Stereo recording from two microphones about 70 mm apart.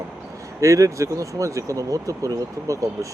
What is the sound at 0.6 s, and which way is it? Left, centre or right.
Speech, right.